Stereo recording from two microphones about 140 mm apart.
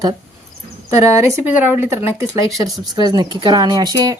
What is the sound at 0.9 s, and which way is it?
Speech, 20° right (ahead or behind).